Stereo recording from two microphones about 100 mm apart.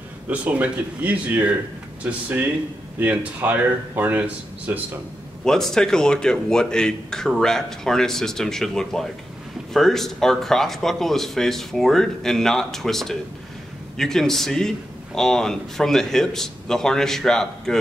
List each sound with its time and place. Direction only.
0.3 s speech: 15° right (ahead or behind)
5.4 s speech: 5° left (ahead or behind)